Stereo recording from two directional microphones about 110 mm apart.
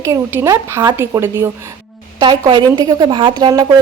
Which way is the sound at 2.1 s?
45° right (ahead or behind).